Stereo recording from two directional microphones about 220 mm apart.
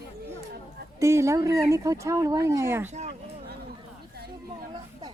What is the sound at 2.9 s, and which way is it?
Speech, 30° right (ahead or behind).